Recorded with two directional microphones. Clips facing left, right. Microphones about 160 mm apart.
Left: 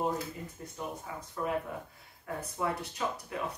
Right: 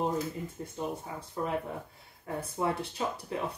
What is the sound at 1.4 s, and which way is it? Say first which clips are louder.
Speech: right 1 dB; 30° right (ahead or behind).